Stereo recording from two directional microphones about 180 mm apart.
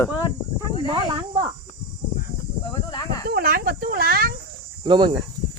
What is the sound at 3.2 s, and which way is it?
Snake, 60° right (ahead or behind).